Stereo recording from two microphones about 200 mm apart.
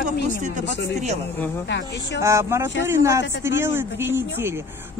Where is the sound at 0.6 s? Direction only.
35° right (ahead or behind).